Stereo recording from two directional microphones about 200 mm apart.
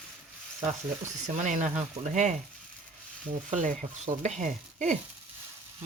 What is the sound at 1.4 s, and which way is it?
Speech, 40° right (ahead or behind).